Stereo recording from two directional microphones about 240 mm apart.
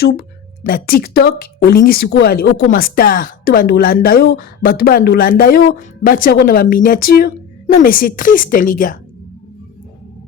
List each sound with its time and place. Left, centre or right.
0.0 s a woman's voice: left